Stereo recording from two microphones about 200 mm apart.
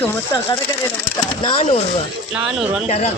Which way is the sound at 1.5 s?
30° left (ahead or behind).